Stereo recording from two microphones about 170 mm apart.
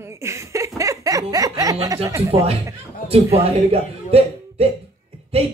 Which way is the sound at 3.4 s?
35° right (ahead or behind).